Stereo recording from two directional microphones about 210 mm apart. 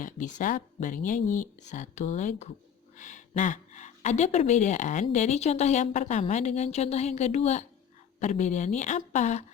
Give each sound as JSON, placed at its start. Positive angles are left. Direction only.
{"t": 0.0, "sound": "a woman's voice", "side_deg": 35}